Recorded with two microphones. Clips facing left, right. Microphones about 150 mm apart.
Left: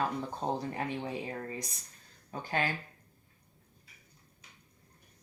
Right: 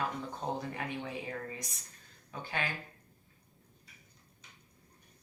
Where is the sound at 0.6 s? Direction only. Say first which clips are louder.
Left 3 dB; 30° left (ahead or behind).